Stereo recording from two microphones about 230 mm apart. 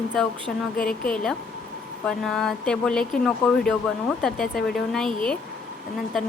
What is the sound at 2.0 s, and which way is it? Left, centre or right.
Speech, centre.